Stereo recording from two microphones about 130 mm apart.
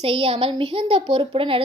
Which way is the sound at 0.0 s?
45° right (ahead or behind).